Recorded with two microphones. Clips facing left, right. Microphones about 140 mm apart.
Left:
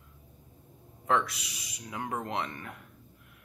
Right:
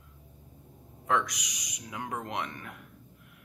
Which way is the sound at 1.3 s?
15° right (ahead or behind).